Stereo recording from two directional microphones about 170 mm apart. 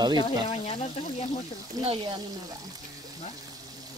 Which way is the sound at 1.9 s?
30° right (ahead or behind).